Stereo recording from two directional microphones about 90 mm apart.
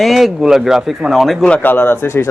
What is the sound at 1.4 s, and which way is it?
Speech, 15° left (ahead or behind).